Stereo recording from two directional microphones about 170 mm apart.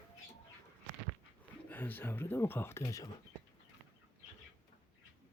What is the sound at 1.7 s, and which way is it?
Speech, 10° left (ahead or behind).